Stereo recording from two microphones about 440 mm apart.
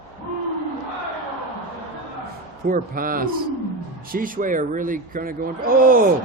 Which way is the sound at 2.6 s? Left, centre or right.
Centre.